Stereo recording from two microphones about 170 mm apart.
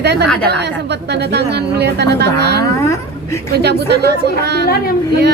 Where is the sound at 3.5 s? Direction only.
75° right (ahead or behind).